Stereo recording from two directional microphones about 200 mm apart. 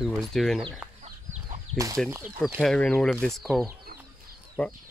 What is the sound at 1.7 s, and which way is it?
Speech, 15° right (ahead or behind).